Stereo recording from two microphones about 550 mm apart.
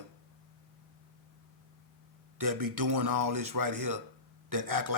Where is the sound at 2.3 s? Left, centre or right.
Right.